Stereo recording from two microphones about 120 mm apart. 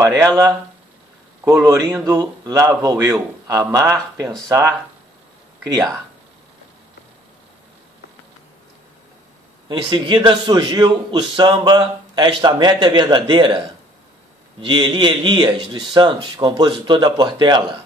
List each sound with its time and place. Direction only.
0.0 s a man's voice: 25° right (ahead or behind)
2.1 s a man's voice: 30° right (ahead or behind)
9.7 s a man's voice: 40° right (ahead or behind)
14.6 s a man's voice: 45° right (ahead or behind)